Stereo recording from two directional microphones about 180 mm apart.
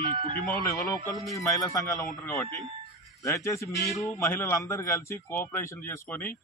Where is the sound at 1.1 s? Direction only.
Centre (ahead or behind).